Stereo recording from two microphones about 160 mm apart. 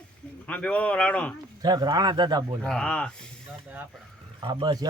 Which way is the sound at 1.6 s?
25° right (ahead or behind).